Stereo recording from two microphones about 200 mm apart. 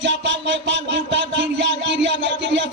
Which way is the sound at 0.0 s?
65° right (ahead or behind).